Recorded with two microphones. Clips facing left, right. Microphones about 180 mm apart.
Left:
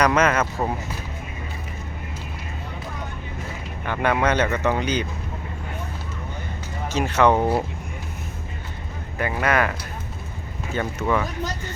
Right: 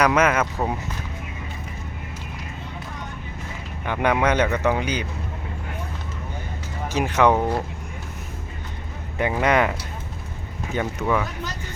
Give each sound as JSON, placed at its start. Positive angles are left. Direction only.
{"t": 0.0, "sound": "speech", "side_deg": -10}
{"t": 3.8, "sound": "speech", "side_deg": -15}
{"t": 6.8, "sound": "speech", "side_deg": -15}
{"t": 7.3, "sound": "speech", "side_deg": 10}
{"t": 9.1, "sound": "speech", "side_deg": -20}